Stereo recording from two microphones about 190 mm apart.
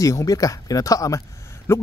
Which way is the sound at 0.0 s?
15° left (ahead or behind).